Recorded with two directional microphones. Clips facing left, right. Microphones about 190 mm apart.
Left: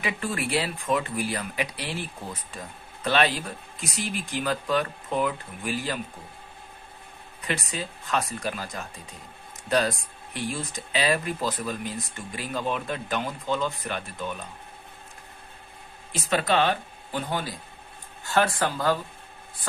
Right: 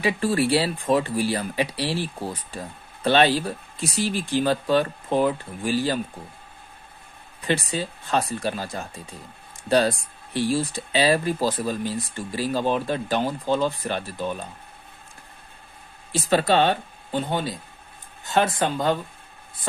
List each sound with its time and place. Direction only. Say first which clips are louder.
0.0 s speech: right 8 dB; 30° right (ahead or behind)
7.4 s speech: right 6 dB; 30° right (ahead or behind)
16.1 s speech: right 4 dB; 30° right (ahead or behind)